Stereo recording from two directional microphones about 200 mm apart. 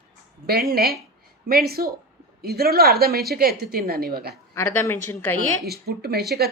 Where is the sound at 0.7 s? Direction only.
50° right (ahead or behind).